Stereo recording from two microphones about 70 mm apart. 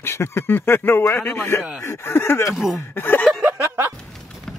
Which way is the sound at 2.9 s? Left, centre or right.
Left.